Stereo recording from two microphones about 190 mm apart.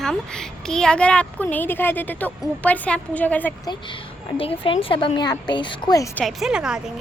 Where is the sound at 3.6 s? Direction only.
25° left (ahead or behind).